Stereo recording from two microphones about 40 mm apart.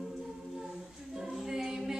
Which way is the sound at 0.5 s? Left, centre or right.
Centre.